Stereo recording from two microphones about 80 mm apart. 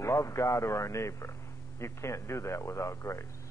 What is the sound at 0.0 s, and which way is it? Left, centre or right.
Speech, left.